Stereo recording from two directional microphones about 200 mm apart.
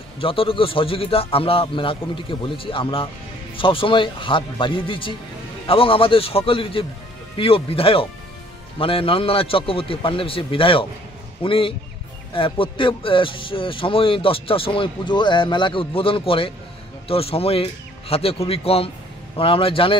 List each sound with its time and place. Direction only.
0.2 s speech: 25° left (ahead or behind)